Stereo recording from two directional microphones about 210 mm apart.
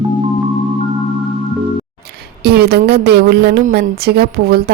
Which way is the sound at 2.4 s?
50° right (ahead or behind).